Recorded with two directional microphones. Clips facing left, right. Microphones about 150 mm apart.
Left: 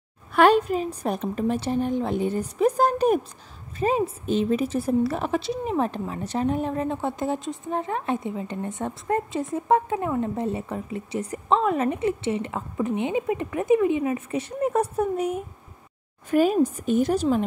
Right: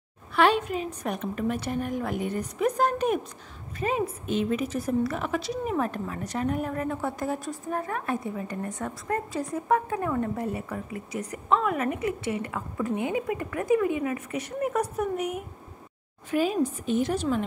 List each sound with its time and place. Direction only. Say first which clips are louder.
0.3 s a woman's voice: left 5 dB; 45° left (ahead or behind); by 15.4 s 30° left (ahead or behind)
16.3 s a woman's voice: left 5 dB; 45° left (ahead or behind)